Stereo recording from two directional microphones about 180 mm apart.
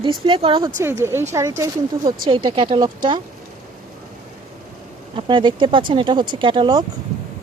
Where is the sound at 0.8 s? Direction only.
15° right (ahead or behind).